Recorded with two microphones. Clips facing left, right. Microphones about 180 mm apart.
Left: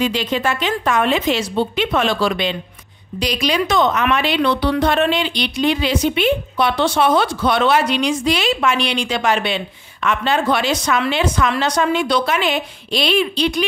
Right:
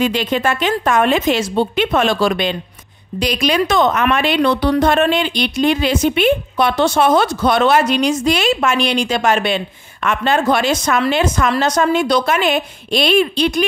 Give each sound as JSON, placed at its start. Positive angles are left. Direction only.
{"t": 0.0, "sound": "a woman's voice", "side_deg": -50}